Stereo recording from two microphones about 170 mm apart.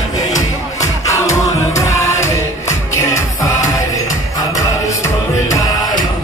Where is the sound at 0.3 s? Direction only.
20° left (ahead or behind).